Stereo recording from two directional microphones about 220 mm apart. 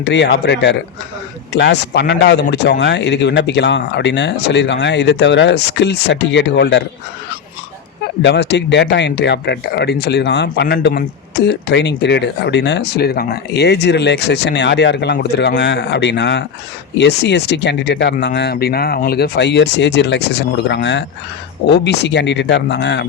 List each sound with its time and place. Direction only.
0.0 s speech: 50° left (ahead or behind)
8.2 s speech: 50° left (ahead or behind)